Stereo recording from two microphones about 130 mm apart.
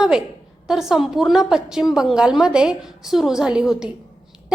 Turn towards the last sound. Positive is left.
turn(degrees=-5)  # may be behind; listen again after turning